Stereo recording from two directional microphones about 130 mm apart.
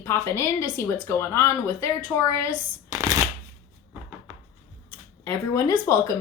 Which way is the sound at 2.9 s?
30° right (ahead or behind).